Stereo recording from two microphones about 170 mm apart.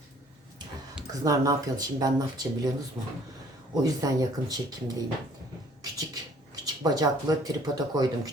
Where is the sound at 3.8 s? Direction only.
20° right (ahead or behind).